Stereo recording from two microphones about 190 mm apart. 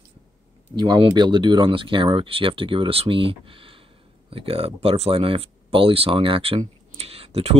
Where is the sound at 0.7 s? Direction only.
20° right (ahead or behind).